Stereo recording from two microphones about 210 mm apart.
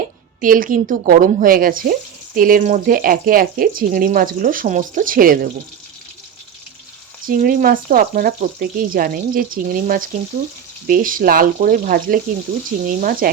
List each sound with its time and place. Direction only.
0.4 s speech: 40° right (ahead or behind)
7.3 s speech: 40° right (ahead or behind)